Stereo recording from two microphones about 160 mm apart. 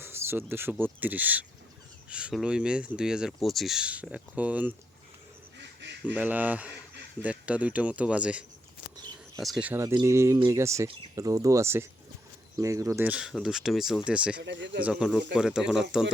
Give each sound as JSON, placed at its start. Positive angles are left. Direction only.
{"t": 0.0, "sound": "speech", "side_deg": -15}
{"t": 6.1, "sound": "speech", "side_deg": -10}
{"t": 9.8, "sound": "speech", "side_deg": -20}
{"t": 14.4, "sound": "speech", "side_deg": -90}
{"t": 14.8, "sound": "speech", "side_deg": -5}